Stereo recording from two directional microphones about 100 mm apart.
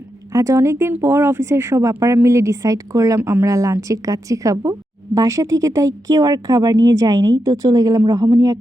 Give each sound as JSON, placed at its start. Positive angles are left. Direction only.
{"t": 0.3, "sound": "a woman's voice", "side_deg": -30}